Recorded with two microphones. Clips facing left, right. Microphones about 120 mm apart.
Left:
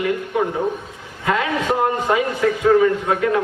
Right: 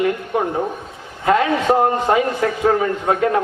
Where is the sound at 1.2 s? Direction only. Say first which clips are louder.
Right 4 dB; 35° right (ahead or behind).